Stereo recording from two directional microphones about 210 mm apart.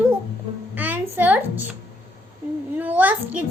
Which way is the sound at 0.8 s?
10° right (ahead or behind).